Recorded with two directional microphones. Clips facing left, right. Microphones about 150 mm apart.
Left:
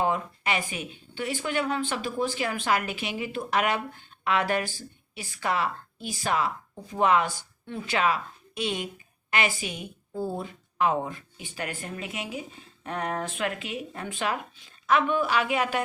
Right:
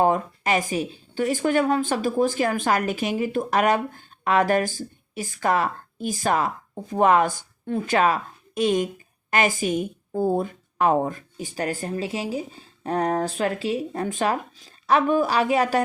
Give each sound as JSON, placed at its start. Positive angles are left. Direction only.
{"t": 0.0, "sound": "a woman's voice", "side_deg": -45}